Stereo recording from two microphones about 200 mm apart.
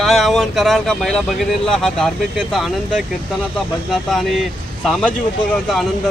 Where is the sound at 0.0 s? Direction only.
Centre (ahead or behind).